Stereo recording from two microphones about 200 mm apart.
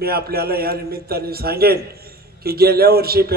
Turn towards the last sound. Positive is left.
turn(degrees=-50)  # may be behind; listen again after turning